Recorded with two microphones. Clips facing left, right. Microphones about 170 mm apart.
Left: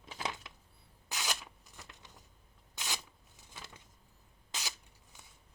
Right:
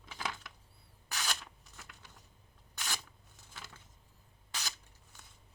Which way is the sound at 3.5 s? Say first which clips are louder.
Left 1 dB; 15° left (ahead or behind).